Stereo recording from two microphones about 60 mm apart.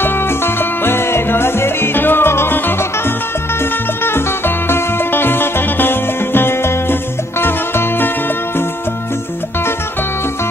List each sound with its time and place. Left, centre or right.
0.0 s music: left
4.0 s music: left